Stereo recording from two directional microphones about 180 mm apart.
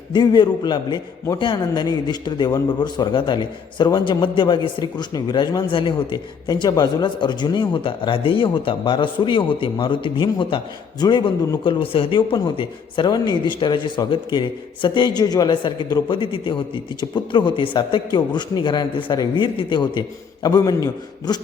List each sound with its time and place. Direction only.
0.1 s a man's voice: 25° left (ahead or behind)